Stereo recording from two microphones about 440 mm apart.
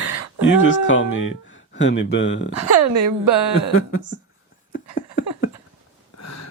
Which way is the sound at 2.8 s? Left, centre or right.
Right.